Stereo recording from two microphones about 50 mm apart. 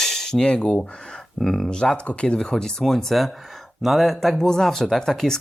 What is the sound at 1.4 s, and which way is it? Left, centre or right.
Speech, centre.